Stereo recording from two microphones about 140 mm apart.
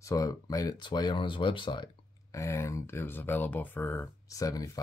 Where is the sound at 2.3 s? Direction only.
20° left (ahead or behind).